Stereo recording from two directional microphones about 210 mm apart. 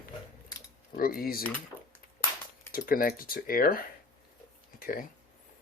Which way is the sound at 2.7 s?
45° left (ahead or behind).